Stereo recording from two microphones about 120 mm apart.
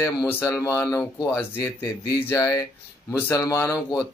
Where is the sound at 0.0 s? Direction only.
20° left (ahead or behind).